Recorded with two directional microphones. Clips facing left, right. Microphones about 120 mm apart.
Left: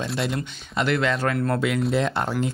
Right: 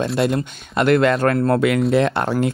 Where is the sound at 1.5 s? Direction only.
65° right (ahead or behind).